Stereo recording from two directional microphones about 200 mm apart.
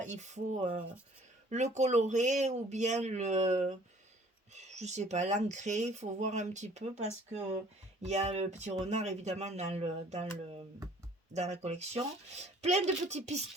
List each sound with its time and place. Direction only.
0.0 s speech: 35° right (ahead or behind)